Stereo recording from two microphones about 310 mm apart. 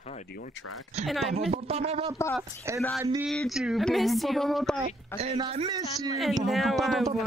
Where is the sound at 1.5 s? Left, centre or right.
Centre.